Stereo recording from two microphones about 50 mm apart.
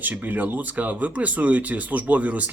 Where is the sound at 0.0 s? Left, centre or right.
Right.